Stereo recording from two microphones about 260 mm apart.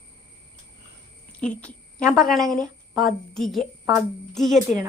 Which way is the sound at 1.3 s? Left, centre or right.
Centre.